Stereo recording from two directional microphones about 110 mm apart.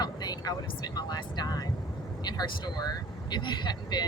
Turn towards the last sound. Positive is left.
turn(degrees=40)  # may be behind; listen again after turning